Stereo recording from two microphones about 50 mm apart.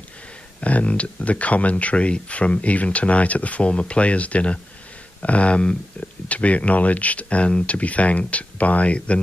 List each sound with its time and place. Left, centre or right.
0.6 s speech: left